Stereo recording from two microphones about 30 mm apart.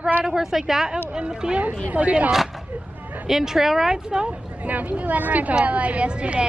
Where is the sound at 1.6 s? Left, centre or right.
Right.